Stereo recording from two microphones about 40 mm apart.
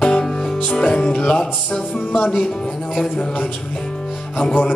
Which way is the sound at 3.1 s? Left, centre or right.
Left.